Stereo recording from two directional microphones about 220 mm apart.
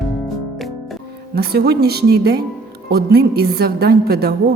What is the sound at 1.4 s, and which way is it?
A woman's voice, 45° right (ahead or behind).